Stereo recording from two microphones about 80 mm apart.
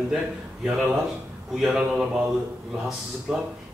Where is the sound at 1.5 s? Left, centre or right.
Centre.